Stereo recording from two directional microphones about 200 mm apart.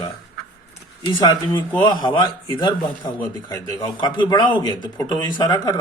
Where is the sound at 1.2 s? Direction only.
20° left (ahead or behind).